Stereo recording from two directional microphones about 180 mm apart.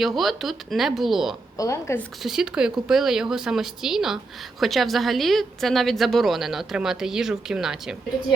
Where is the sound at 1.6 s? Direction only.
15° left (ahead or behind).